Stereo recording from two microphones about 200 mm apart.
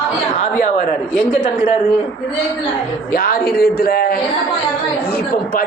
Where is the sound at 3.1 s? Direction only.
50° left (ahead or behind).